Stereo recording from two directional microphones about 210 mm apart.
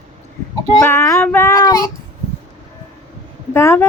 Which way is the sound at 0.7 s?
15° left (ahead or behind).